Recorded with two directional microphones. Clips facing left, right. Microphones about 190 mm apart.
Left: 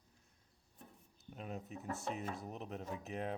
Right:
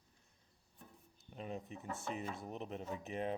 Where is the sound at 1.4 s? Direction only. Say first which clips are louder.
Right 1 dB; centre (ahead or behind).